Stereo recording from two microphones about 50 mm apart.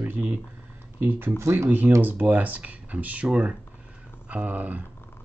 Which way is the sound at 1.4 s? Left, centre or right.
Right.